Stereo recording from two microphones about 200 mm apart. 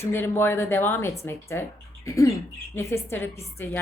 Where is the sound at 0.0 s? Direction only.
10° left (ahead or behind).